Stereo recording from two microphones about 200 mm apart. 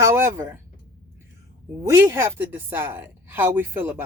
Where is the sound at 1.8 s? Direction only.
15° right (ahead or behind).